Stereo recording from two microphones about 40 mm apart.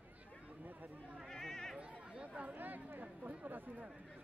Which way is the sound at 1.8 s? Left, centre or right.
Right.